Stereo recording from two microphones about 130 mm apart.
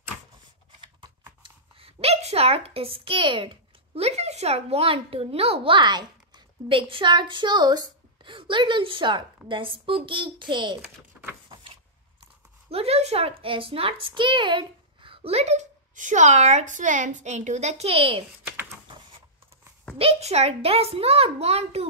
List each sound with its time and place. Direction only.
1.4 s a woman's voice: 45° right (ahead or behind)
10.8 s a sound: 15° right (ahead or behind)
12.6 s speech: 50° right (ahead or behind)
20.0 s speech: 50° right (ahead or behind)